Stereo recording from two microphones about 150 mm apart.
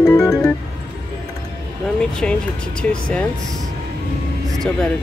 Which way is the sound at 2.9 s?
5° left (ahead or behind).